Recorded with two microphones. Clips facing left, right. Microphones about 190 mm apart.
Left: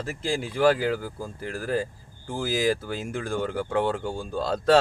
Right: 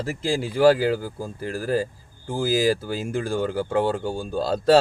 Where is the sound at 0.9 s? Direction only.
30° right (ahead or behind).